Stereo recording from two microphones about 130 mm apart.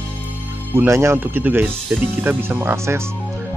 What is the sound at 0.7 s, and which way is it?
Speech, 20° right (ahead or behind).